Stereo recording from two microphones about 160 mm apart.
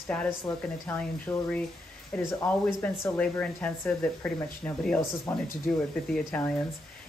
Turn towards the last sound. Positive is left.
turn(degrees=10)  # may be behind; listen again after turning